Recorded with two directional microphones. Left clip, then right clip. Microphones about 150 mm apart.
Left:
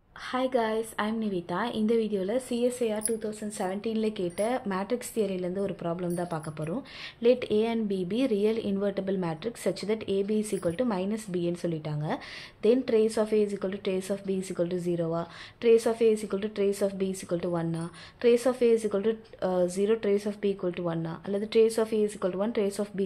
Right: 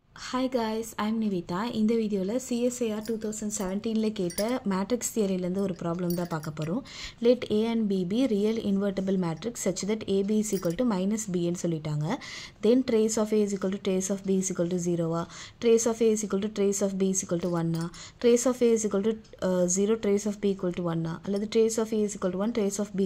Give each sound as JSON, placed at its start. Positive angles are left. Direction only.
{"t": 0.3, "sound": "a woman's voice", "side_deg": -35}